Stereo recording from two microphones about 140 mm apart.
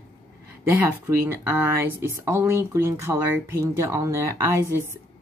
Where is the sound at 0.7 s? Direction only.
20° right (ahead or behind).